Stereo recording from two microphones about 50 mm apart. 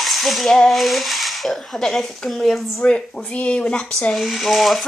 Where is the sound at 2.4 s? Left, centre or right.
Centre.